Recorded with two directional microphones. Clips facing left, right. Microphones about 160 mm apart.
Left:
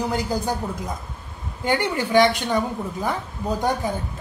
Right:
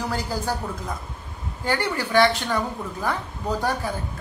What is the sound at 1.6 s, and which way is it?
Speech, 20° left (ahead or behind).